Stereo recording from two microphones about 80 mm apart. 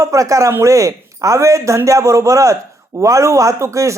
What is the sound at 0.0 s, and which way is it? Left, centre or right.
Speech, right.